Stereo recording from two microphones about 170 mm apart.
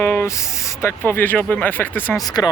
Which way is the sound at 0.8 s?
15° left (ahead or behind).